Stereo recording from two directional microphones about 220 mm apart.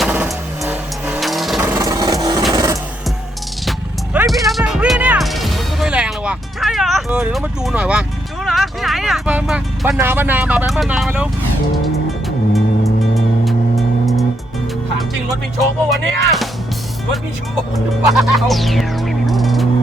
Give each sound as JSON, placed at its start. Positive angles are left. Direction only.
{"t": 0.0, "sound": "vehicle", "side_deg": -5}
{"t": 2.5, "sound": "music", "side_deg": -15}
{"t": 3.7, "sound": "music", "side_deg": -5}
{"t": 12.5, "sound": "music", "side_deg": 0}
{"t": 15.9, "sound": "speech", "side_deg": 0}
{"t": 17.7, "sound": "music", "side_deg": 0}